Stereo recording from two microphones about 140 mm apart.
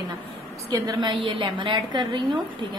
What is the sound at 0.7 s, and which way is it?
A woman's voice, 30° right (ahead or behind).